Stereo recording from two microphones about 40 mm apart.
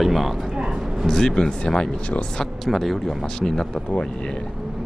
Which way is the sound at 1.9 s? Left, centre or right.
Left.